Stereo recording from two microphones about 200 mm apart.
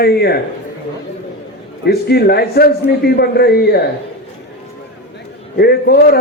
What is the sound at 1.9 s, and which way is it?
Speech, 50° left (ahead or behind).